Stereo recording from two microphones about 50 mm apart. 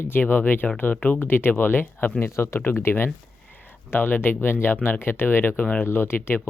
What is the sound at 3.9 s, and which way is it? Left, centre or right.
Speech, left.